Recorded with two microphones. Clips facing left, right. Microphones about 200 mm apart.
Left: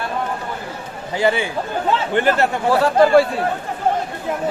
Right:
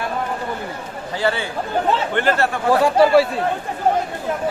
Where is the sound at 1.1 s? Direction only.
15° left (ahead or behind).